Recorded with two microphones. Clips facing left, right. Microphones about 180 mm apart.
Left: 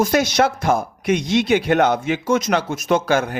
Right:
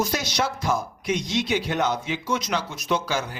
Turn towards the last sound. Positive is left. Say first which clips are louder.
# left 8 dB
turn(degrees=55)  # may be behind; listen again after turning